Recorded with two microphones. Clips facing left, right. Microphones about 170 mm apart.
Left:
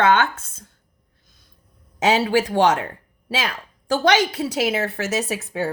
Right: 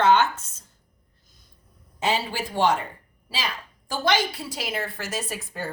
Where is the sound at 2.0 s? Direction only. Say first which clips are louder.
Left 8 dB; 90° left; by 5.7 s 75° left (ahead or behind).